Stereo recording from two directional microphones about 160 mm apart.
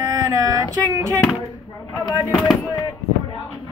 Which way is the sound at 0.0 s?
20° right (ahead or behind).